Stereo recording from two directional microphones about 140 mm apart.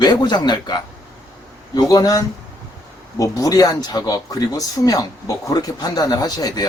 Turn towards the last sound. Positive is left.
turn(degrees=30)  # may be behind; listen again after turning